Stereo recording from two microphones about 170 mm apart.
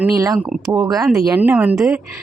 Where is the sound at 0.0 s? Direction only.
15° right (ahead or behind).